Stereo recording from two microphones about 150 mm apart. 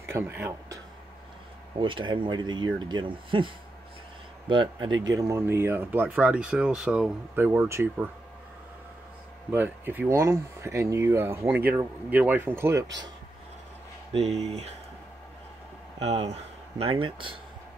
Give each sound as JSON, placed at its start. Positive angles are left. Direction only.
{"t": 0.1, "sound": "speech", "side_deg": -15}
{"t": 1.8, "sound": "speech", "side_deg": -35}
{"t": 9.5, "sound": "speech", "side_deg": -15}
{"t": 14.1, "sound": "speech", "side_deg": -45}
{"t": 16.0, "sound": "speech", "side_deg": -45}